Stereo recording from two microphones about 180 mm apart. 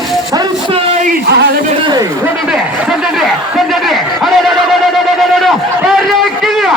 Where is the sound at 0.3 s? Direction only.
20° right (ahead or behind).